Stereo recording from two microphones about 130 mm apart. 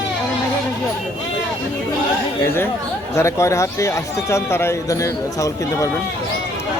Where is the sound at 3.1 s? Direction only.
20° left (ahead or behind).